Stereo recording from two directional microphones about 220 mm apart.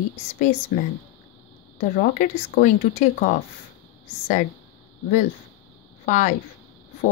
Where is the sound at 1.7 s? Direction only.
35° left (ahead or behind).